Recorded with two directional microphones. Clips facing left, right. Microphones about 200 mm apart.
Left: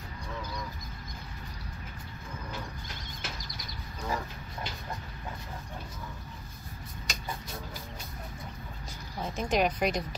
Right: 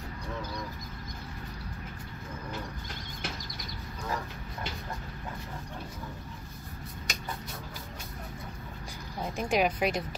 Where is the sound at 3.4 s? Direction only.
50° right (ahead or behind).